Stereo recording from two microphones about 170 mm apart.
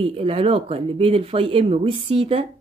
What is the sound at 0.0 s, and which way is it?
A woman's voice, 35° right (ahead or behind).